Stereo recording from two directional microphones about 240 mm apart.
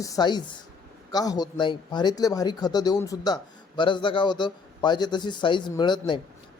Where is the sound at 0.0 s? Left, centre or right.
Centre.